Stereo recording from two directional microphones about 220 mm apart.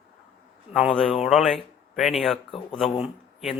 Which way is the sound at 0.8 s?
Centre (ahead or behind).